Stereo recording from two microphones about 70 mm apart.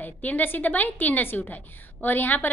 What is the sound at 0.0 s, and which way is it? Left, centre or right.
A woman's voice, left.